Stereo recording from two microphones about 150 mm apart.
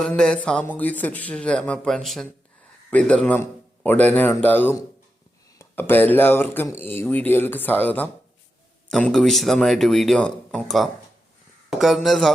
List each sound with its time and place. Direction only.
0.2 s speech: 5° left (ahead or behind)